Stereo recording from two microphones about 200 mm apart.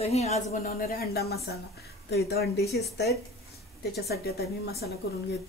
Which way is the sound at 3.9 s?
50° left (ahead or behind).